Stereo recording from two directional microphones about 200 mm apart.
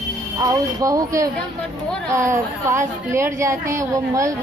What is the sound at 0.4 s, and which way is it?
A woman's voice, 15° right (ahead or behind).